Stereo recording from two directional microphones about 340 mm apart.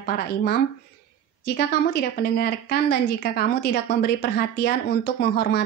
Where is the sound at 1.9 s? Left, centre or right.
Left.